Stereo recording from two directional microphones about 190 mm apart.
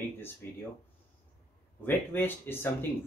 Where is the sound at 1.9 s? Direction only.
10° left (ahead or behind).